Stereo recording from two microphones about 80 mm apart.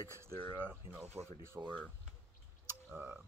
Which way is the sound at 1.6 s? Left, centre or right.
Centre.